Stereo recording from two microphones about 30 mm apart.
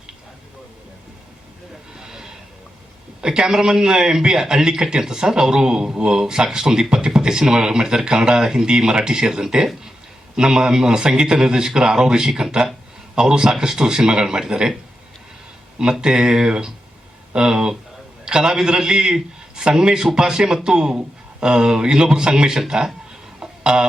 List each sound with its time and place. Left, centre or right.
2.0 s neigh: right
3.2 s a man's voice: right
15.8 s a man's voice: right
23.4 s a sound: right